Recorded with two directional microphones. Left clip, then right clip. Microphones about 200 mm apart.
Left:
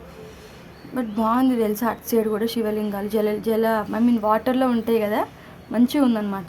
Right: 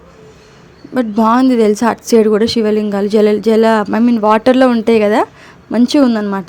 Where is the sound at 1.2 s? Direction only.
30° right (ahead or behind).